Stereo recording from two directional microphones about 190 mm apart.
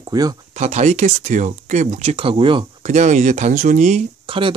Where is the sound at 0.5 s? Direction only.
35° right (ahead or behind).